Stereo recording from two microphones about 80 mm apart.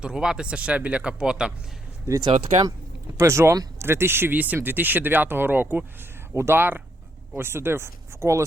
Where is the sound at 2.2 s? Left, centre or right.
Right.